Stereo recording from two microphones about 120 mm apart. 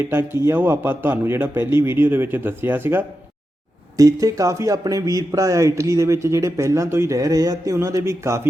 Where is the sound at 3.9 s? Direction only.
30° right (ahead or behind).